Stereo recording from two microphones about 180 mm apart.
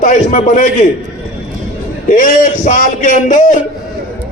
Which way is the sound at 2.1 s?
45° left (ahead or behind).